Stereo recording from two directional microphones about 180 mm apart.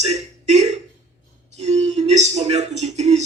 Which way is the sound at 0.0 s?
35° right (ahead or behind).